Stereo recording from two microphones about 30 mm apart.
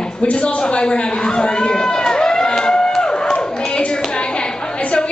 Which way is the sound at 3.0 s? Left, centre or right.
Left.